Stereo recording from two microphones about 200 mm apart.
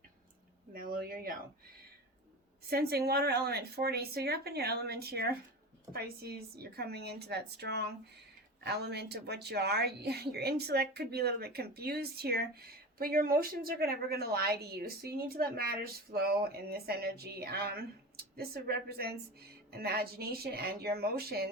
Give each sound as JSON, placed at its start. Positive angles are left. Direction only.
{"t": 0.7, "sound": "speech", "side_deg": -45}
{"t": 2.6, "sound": "a woman's voice", "side_deg": -50}